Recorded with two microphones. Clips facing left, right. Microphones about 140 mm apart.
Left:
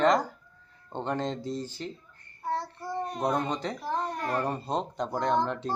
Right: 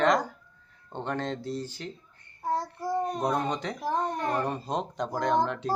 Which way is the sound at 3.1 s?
Centre (ahead or behind).